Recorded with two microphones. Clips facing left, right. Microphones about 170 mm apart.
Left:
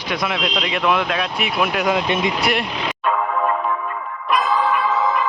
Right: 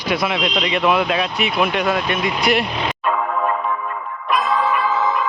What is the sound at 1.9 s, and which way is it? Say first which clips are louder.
Speech: left 1 dB; 15° left (ahead or behind).